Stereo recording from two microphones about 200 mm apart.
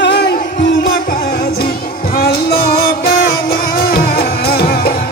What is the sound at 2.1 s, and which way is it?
Music, 45° left (ahead or behind).